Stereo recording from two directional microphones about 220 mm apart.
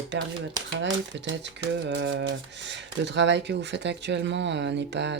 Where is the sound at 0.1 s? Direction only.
55° right (ahead or behind).